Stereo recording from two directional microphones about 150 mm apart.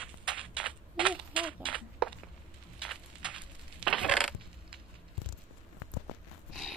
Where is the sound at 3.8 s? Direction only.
5° left (ahead or behind).